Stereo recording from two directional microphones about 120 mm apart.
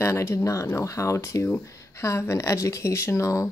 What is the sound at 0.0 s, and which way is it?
Speech, 25° left (ahead or behind).